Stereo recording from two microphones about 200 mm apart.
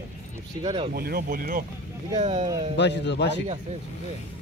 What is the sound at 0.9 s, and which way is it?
Speech, 50° right (ahead or behind).